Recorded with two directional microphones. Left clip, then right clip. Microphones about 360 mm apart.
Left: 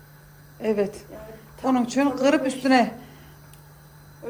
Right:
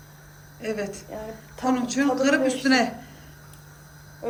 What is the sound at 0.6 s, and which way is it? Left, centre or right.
A man's voice, centre.